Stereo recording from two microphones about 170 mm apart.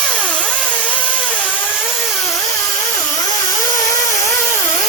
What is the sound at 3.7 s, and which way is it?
Vehicle, 20° left (ahead or behind).